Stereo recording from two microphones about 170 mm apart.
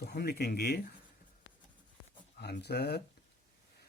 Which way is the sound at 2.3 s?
75° left (ahead or behind).